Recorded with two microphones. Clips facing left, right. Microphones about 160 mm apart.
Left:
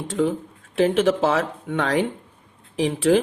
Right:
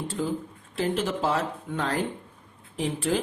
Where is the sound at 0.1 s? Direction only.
75° left (ahead or behind).